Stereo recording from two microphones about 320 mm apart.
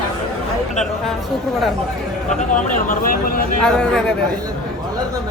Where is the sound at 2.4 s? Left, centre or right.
Left.